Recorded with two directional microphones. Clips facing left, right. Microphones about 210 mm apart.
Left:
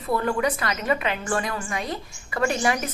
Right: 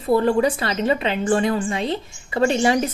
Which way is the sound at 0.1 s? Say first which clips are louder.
Right 6 dB; 30° right (ahead or behind).